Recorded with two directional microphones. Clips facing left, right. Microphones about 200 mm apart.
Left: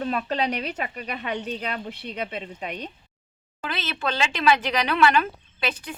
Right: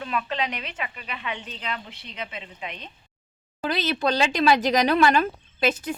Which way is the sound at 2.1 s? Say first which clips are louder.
Left 3 dB; 35° left (ahead or behind).